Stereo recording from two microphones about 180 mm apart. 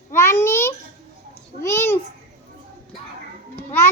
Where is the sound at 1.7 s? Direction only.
15° left (ahead or behind).